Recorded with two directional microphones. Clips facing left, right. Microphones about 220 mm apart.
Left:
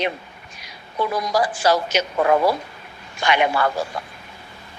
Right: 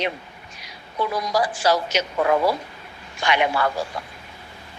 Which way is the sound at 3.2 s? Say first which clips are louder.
Left 2 dB; 50° left (ahead or behind).